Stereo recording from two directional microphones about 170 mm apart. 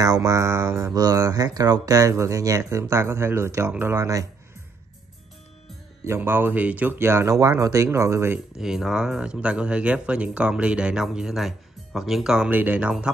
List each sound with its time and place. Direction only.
0.0 s speech: 20° right (ahead or behind)
6.0 s speech: 15° right (ahead or behind)
8.5 s speech: 5° right (ahead or behind)